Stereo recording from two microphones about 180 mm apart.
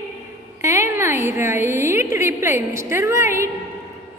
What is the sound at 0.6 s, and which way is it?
A woman's voice, 15° right (ahead or behind).